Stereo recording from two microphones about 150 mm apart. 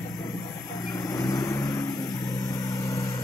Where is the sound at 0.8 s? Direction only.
25° left (ahead or behind).